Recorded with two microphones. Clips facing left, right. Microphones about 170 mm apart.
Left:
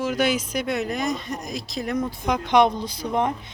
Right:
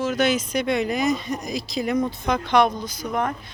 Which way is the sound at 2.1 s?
15° left (ahead or behind).